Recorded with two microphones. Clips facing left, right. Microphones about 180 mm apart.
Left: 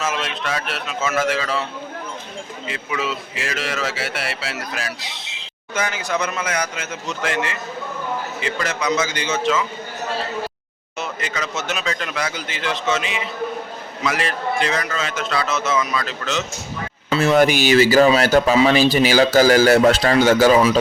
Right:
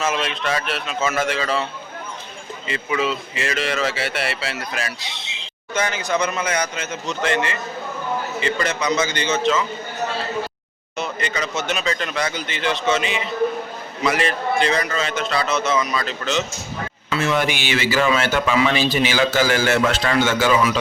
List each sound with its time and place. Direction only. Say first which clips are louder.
0.0 s speech: right 2 dB; 5° left (ahead or behind)
2.6 s speech: right 3 dB; centre (ahead or behind)
10.9 s speech: right 2 dB; 5° left (ahead or behind)
17.1 s speech: left 6 dB; 35° left (ahead or behind)